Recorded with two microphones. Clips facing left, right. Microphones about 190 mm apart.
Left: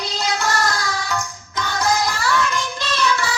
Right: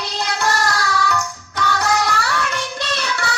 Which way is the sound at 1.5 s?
65° right (ahead or behind).